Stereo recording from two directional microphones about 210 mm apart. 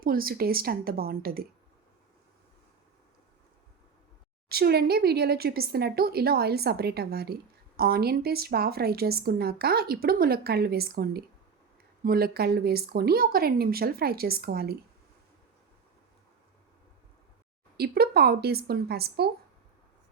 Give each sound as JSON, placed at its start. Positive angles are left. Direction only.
{"t": 0.0, "sound": "a woman's voice", "side_deg": -45}
{"t": 4.4, "sound": "a woman's voice", "side_deg": -50}
{"t": 17.7, "sound": "a woman's voice", "side_deg": -45}